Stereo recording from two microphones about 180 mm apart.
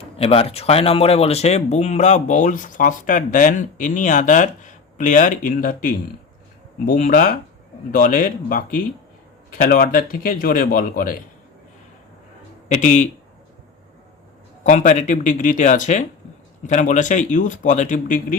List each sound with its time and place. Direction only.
0.0 s speech: 35° left (ahead or behind); by 11.2 s 50° left (ahead or behind)
12.6 s a man's voice: 40° left (ahead or behind)
14.6 s speech: 45° left (ahead or behind)